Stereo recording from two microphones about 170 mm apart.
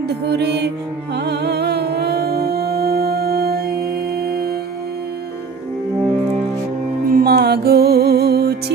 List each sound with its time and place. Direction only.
0.1 s music: 75° right (ahead or behind)
7.1 s music: 65° right (ahead or behind)